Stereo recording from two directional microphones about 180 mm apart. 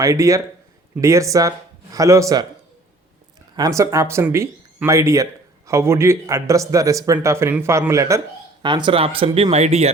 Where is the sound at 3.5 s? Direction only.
20° right (ahead or behind).